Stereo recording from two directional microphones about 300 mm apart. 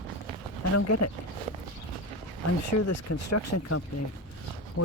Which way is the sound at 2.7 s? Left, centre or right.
Left.